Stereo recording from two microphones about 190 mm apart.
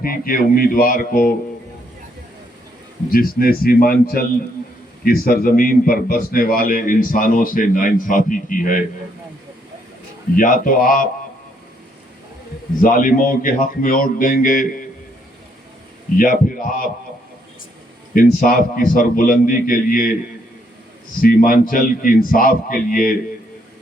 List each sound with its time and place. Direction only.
0.0 s a man's voice: 50° left (ahead or behind)
3.1 s a man's voice: 50° left (ahead or behind)
10.3 s a man's voice: 45° left (ahead or behind)
12.8 s a man's voice: 45° left (ahead or behind)
16.1 s a man's voice: 45° left (ahead or behind)
18.1 s a man's voice: 45° left (ahead or behind)
21.2 s a man's voice: 50° left (ahead or behind)